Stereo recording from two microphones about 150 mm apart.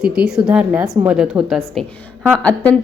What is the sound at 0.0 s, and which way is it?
A woman's voice, 5° right (ahead or behind).